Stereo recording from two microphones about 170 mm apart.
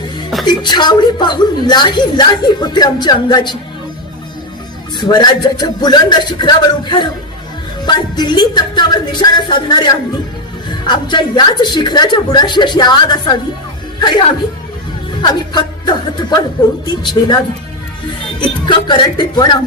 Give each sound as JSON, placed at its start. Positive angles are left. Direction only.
{"t": 0.4, "sound": "a woman's voice", "side_deg": 25}
{"t": 4.9, "sound": "a woman's voice", "side_deg": 25}
{"t": 18.3, "sound": "a woman's voice", "side_deg": 25}